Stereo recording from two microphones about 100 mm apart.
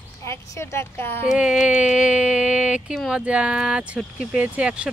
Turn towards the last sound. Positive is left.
turn(degrees=-10)  # may be behind; listen again after turning